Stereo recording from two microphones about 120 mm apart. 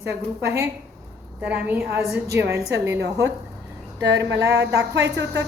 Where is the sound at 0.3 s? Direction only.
20° right (ahead or behind).